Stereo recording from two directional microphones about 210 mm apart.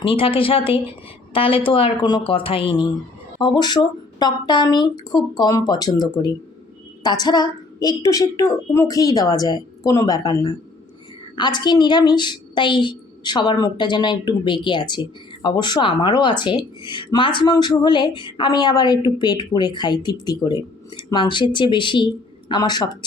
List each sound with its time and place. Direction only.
0.0 s a woman's voice: 25° left (ahead or behind)